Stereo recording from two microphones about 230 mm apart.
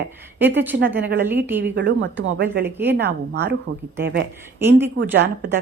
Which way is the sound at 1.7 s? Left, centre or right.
Right.